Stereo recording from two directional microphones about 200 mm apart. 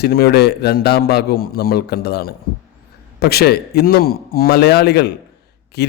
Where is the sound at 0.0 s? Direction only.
50° left (ahead or behind).